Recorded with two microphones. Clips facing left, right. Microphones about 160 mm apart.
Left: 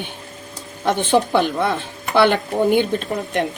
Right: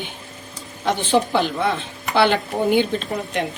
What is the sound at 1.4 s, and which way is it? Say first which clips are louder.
A woman's voice: left 2 dB; 50° left (ahead or behind).